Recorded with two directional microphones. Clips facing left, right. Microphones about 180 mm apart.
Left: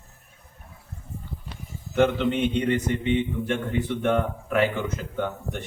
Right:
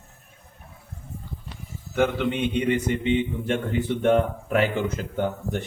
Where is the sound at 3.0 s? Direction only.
25° right (ahead or behind).